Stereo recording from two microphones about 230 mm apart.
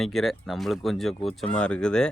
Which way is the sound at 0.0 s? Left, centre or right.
Centre.